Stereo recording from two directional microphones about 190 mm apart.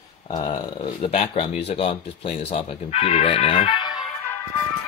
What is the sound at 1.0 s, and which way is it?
Speech, 30° left (ahead or behind).